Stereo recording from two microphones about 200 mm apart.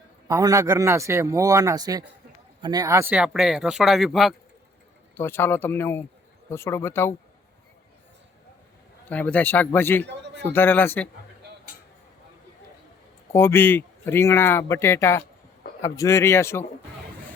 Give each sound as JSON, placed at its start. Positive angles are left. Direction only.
{"t": 0.3, "sound": "speech", "side_deg": -15}
{"t": 5.1, "sound": "speech", "side_deg": 10}
{"t": 9.0, "sound": "speech", "side_deg": 5}
{"t": 13.3, "sound": "speech", "side_deg": 10}